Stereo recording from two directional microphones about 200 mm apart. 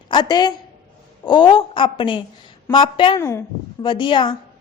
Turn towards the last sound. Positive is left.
turn(degrees=25)  # may be behind; listen again after turning